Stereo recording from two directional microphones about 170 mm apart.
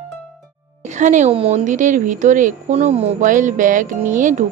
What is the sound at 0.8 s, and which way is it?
Speech, 45° right (ahead or behind).